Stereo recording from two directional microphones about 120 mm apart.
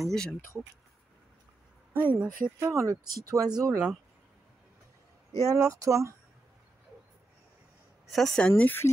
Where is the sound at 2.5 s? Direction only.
25° right (ahead or behind).